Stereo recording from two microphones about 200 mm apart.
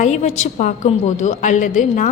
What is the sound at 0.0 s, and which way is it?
A woman's voice, 35° left (ahead or behind).